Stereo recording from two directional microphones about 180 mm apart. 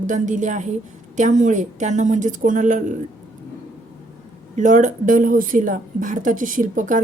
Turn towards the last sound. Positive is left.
turn(degrees=-45)  # may be behind; listen again after turning